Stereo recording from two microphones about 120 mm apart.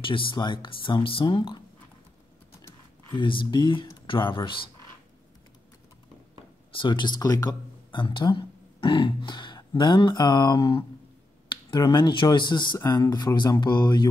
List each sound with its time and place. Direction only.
0.0 s speech: 45° left (ahead or behind)
3.1 s speech: 45° left (ahead or behind)
6.7 s speech: 40° left (ahead or behind)
8.0 s speech: 45° left (ahead or behind)
12.7 s speech: 30° left (ahead or behind)